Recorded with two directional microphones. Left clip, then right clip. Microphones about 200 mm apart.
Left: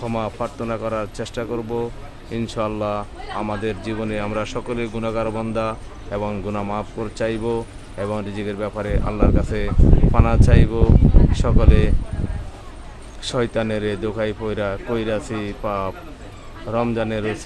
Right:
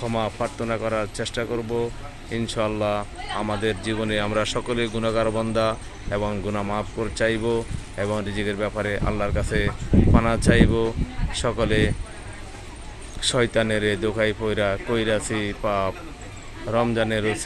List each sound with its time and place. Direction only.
0.0 s speech: 10° left (ahead or behind)
13.2 s speech: 5° left (ahead or behind)